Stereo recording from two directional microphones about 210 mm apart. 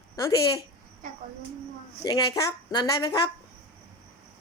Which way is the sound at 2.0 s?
20° left (ahead or behind).